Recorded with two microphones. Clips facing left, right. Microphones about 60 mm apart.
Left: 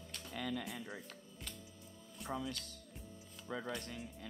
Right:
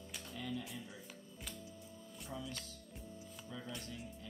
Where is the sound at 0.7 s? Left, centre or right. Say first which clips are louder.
Left 3 dB; left.